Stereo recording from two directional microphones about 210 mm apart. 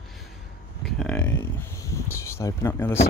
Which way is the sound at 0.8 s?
5° left (ahead or behind).